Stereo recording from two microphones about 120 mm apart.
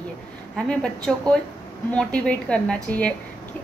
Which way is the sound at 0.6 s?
5° left (ahead or behind).